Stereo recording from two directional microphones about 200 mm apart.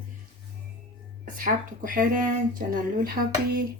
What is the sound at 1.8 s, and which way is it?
Speech, 45° right (ahead or behind).